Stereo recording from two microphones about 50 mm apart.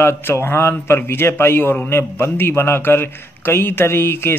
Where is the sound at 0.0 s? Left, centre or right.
Left.